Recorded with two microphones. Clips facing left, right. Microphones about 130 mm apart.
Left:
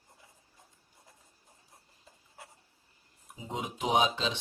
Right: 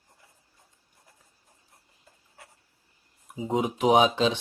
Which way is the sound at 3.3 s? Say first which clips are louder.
Right 11 dB; 55° right (ahead or behind).